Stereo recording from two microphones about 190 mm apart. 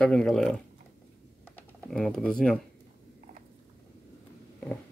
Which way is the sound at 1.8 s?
Centre (ahead or behind).